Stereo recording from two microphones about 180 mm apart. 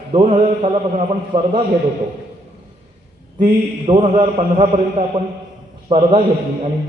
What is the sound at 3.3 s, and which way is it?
Speech, 50° right (ahead or behind).